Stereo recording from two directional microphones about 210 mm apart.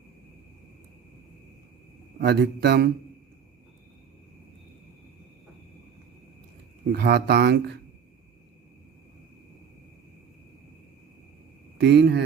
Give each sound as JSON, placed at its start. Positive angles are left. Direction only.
{"t": 2.2, "sound": "a man's voice", "side_deg": -55}
{"t": 6.9, "sound": "a man's voice", "side_deg": -50}
{"t": 11.8, "sound": "a man's voice", "side_deg": -55}